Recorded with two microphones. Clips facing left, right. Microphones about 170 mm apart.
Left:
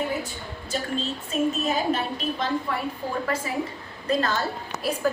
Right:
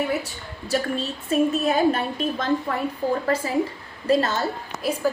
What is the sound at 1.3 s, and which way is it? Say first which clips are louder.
Speech: right 5 dB; 55° right (ahead or behind).